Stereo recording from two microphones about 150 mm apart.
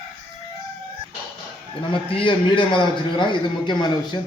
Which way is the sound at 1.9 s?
35° left (ahead or behind).